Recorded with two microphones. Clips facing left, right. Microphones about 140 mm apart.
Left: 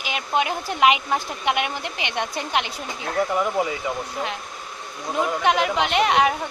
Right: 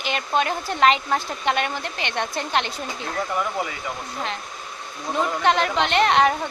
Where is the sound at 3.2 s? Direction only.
20° left (ahead or behind).